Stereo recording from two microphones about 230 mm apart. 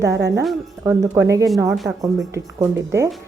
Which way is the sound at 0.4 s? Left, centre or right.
Centre.